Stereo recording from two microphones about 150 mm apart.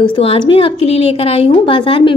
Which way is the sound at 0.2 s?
40° left (ahead or behind).